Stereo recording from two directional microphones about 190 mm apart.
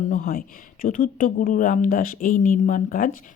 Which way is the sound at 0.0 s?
45° left (ahead or behind).